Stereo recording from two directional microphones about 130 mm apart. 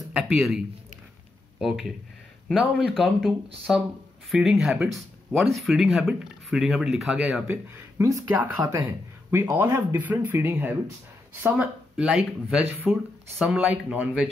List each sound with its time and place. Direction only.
0.1 s speech: 5° right (ahead or behind)
7.4 s speech: 15° right (ahead or behind)
9.3 s speech: 20° right (ahead or behind)